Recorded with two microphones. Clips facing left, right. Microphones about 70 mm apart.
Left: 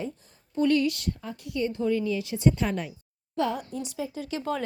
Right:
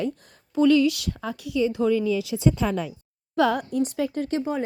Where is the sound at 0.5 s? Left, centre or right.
Right.